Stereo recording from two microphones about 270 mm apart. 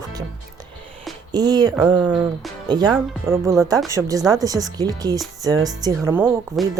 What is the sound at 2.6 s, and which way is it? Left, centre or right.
Speech, centre.